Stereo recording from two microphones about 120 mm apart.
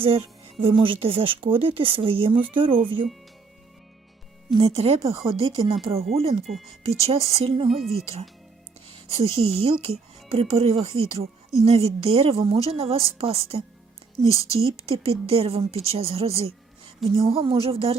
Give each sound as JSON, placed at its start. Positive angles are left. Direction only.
{"t": 0.0, "sound": "speech", "side_deg": -50}
{"t": 4.5, "sound": "speech", "side_deg": -55}
{"t": 6.4, "sound": "speech", "side_deg": 0}
{"t": 6.8, "sound": "speech", "side_deg": -55}
{"t": 7.7, "sound": "speech", "side_deg": 0}
{"t": 8.9, "sound": "speech", "side_deg": -55}
{"t": 14.8, "sound": "speech", "side_deg": -55}